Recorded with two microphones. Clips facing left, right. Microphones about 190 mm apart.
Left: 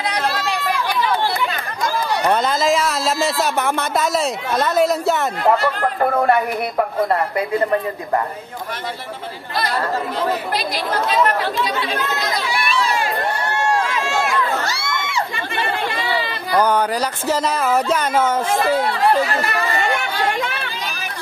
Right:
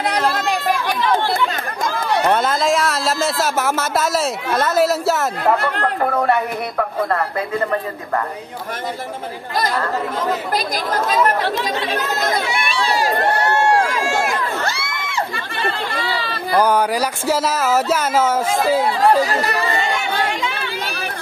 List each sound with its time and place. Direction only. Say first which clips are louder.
0.0 s chatter: right 3 dB; 50° right (ahead or behind)
2.3 s speech: even; centre (ahead or behind)
6.8 s speech: left 1 dB; 15° left (ahead or behind)
10.5 s speech: right 1 dB; 45° right (ahead or behind)
12.4 s speech: even; 30° right (ahead or behind)
13.5 s run: right 2 dB; 60° right (ahead or behind)
14.1 s crowd: left 1 dB; 50° right (ahead or behind)
16.0 s a sound: left 1 dB; 15° left (ahead or behind)
16.5 s speech: right 1 dB; 10° right (ahead or behind)
19.2 s speech: right 1 dB; 35° right (ahead or behind)
19.9 s chatter: even; 55° left (ahead or behind)